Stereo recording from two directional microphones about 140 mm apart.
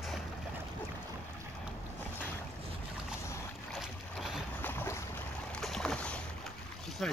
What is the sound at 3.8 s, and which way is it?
Boat, 5° right (ahead or behind).